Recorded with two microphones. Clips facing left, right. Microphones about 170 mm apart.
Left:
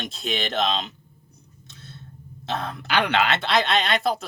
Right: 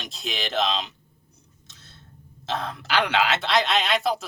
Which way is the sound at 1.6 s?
55° left (ahead or behind).